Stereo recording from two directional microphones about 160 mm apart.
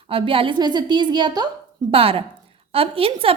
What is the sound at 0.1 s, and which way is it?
A woman's voice, 35° right (ahead or behind).